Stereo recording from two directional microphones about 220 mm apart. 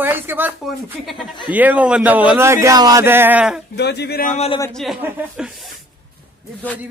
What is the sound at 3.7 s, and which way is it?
Speech, 50° left (ahead or behind).